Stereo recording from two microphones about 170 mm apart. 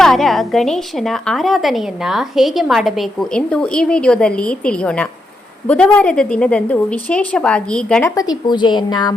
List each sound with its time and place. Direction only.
0.0 s a woman's voice: centre (ahead or behind)
8.1 s a woman's voice: 20° left (ahead or behind)